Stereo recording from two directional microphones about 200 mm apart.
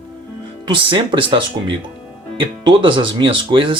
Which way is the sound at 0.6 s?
25° right (ahead or behind).